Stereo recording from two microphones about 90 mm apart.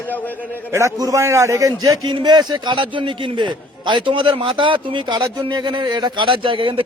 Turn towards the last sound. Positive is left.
turn(degrees=-75)  # may be behind; listen again after turning